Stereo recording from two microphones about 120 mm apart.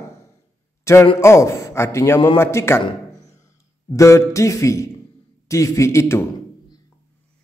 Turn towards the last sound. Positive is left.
turn(degrees=25)  # may be behind; listen again after turning